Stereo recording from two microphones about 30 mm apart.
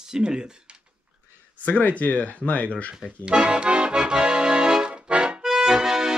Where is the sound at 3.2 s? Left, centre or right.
Right.